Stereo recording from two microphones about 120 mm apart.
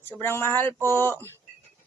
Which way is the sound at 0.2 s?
20° left (ahead or behind).